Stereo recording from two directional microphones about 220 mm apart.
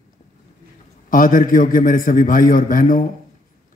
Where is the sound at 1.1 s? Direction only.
40° left (ahead or behind).